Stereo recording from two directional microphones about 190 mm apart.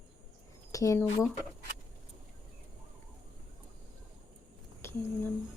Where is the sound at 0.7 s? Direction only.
15° left (ahead or behind).